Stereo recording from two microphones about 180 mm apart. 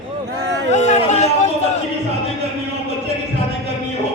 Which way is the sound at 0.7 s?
40° left (ahead or behind).